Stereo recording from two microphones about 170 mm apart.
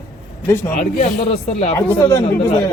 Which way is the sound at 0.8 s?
45° left (ahead or behind).